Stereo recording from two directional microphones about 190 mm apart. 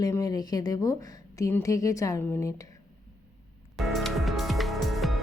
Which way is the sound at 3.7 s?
Centre (ahead or behind).